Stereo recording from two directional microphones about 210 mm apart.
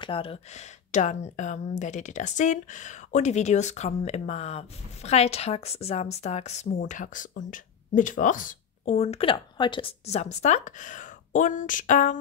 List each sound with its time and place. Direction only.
0.0 s speech: 25° left (ahead or behind)